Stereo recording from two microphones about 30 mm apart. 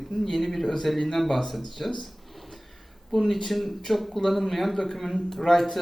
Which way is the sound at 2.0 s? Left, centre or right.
Centre.